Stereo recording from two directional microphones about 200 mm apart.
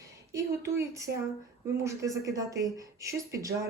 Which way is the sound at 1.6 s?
15° right (ahead or behind).